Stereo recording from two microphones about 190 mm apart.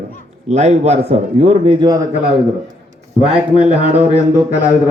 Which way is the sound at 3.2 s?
5° right (ahead or behind).